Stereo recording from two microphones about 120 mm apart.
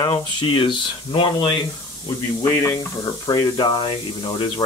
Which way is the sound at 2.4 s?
25° left (ahead or behind).